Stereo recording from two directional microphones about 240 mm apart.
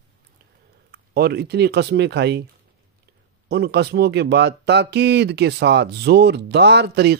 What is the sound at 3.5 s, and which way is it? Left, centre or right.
Speech, right.